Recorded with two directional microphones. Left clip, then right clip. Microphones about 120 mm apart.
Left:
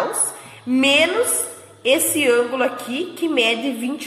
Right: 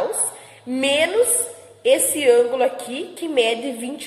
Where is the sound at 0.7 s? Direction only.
40° right (ahead or behind).